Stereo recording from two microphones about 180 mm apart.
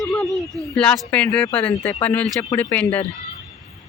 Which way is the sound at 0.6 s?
Centre (ahead or behind).